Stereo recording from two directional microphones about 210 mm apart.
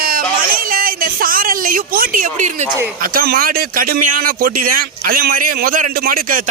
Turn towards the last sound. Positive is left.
turn(degrees=-40)  # may be behind; listen again after turning